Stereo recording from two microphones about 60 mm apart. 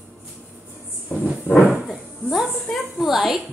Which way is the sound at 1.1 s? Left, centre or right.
Left.